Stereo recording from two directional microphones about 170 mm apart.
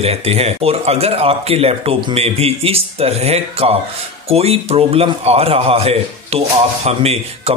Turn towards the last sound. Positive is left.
turn(degrees=-40)  # may be behind; listen again after turning